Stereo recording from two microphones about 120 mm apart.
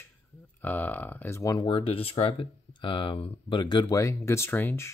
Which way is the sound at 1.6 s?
45° left (ahead or behind).